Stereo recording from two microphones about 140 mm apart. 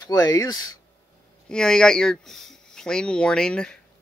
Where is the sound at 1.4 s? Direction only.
5° left (ahead or behind).